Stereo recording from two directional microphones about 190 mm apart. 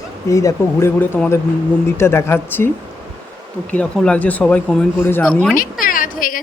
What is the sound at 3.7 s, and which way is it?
Speech, 5° left (ahead or behind).